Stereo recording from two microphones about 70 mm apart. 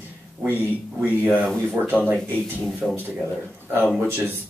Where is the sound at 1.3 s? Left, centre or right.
Centre.